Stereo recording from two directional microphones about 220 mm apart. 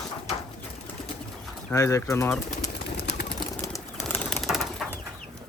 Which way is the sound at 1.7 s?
15° left (ahead or behind).